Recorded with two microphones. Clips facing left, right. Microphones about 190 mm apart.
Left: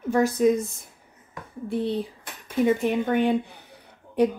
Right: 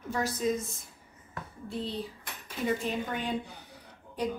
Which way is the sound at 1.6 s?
60° left (ahead or behind).